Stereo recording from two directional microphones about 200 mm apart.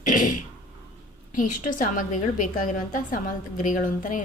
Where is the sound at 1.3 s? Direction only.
40° left (ahead or behind).